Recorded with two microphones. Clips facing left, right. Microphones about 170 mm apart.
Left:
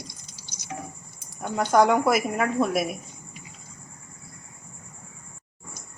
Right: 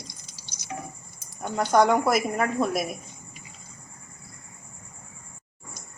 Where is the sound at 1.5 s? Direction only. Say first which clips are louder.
Left 1 dB; centre (ahead or behind).